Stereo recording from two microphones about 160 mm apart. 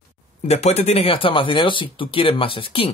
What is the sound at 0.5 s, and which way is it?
Speech, 45° left (ahead or behind).